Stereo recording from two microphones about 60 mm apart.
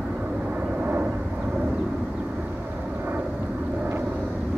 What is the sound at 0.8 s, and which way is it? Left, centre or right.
Vehicle, right.